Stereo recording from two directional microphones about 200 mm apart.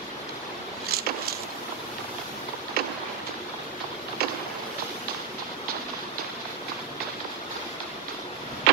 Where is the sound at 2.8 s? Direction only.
50° right (ahead or behind).